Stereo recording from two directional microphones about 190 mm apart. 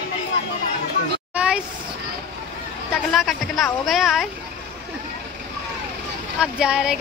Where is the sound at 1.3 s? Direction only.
5° right (ahead or behind).